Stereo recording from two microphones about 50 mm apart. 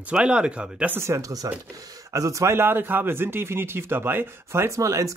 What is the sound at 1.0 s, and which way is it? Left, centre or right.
Speech, right.